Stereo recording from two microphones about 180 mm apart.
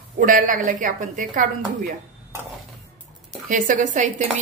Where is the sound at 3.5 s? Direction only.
45° right (ahead or behind).